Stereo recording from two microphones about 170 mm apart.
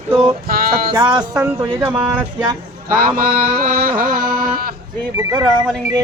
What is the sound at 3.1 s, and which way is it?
Music, 55° right (ahead or behind).